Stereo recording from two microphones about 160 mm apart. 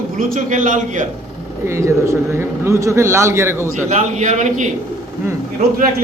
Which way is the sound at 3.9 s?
50° right (ahead or behind).